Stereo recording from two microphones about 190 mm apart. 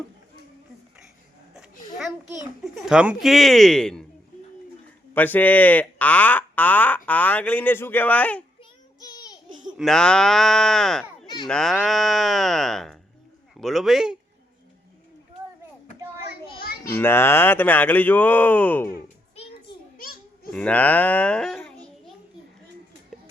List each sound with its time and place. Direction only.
1.7 s a sound: 45° left (ahead or behind)
2.7 s speech: 5° right (ahead or behind)
5.1 s speech: 10° left (ahead or behind)
9.0 s child singing: 20° left (ahead or behind)
9.7 s speech: centre (ahead or behind)
16.9 s speech: 10° left (ahead or behind)
20.0 s babbling: 50° left (ahead or behind)
20.5 s a child's voice: 10° left (ahead or behind)